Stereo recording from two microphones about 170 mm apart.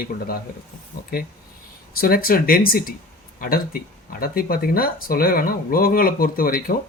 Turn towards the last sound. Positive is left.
turn(degrees=60)  # may be behind; listen again after turning